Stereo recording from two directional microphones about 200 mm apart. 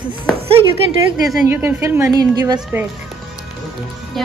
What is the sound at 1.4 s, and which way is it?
A woman's voice, 10° right (ahead or behind).